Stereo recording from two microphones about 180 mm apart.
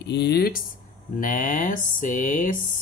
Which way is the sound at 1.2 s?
45° left (ahead or behind).